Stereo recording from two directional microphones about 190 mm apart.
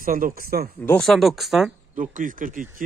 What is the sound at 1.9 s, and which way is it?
Speech, 45° right (ahead or behind).